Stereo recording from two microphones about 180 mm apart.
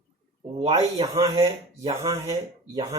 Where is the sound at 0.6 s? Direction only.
35° right (ahead or behind).